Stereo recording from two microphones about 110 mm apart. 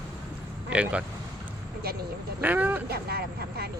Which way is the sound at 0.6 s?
10° right (ahead or behind).